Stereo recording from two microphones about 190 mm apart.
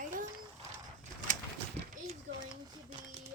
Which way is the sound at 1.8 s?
35° right (ahead or behind).